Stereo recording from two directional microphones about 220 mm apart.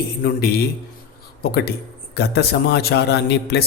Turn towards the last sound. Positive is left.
turn(degrees=45)  # may be behind; listen again after turning